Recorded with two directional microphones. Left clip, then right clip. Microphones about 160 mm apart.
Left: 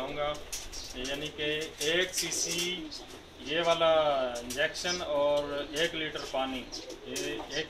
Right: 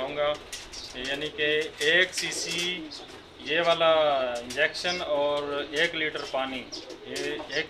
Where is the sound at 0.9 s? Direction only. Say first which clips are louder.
Right 5 dB; 10° right (ahead or behind).